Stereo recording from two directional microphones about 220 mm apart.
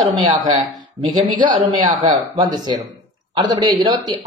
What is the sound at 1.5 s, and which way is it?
Speech, 20° right (ahead or behind).